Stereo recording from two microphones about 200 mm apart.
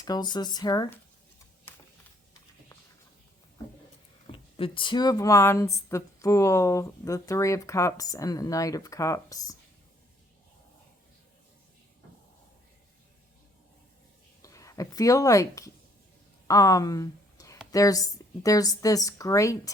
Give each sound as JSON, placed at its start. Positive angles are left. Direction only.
{"t": 0.0, "sound": "speech", "side_deg": 20}
{"t": 4.3, "sound": "speech", "side_deg": 25}
{"t": 14.4, "sound": "speech", "side_deg": 15}
{"t": 16.5, "sound": "a sound", "side_deg": 15}
{"t": 17.7, "sound": "speech", "side_deg": 15}